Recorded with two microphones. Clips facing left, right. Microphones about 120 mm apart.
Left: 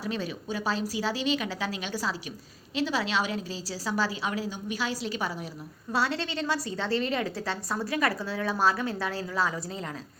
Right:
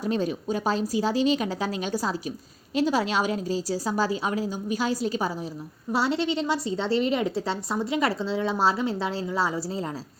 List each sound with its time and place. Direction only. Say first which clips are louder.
0.0 s a woman's voice: right 6 dB; 45° right (ahead or behind)
5.9 s a woman's voice: right 4 dB; 25° right (ahead or behind)